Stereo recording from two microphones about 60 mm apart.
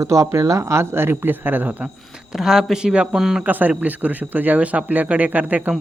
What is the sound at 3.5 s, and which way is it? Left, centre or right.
Speech, right.